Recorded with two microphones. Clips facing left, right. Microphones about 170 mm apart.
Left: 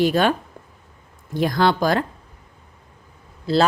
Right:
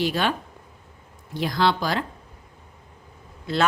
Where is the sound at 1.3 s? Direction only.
50° left (ahead or behind).